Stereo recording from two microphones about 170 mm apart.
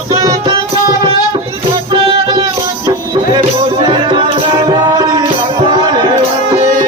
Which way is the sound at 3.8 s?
30° right (ahead or behind).